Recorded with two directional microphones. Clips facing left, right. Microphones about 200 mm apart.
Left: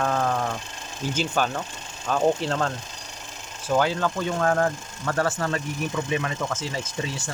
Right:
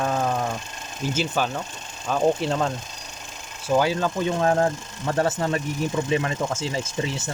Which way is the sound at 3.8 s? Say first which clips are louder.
Right 1 dB; 15° right (ahead or behind).